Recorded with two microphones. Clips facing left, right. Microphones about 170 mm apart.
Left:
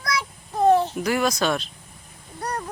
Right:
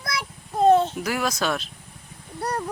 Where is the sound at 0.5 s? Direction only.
20° right (ahead or behind).